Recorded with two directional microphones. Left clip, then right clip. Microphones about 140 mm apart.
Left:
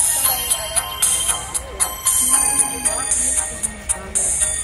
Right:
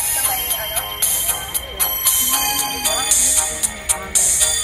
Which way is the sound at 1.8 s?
65° right (ahead or behind).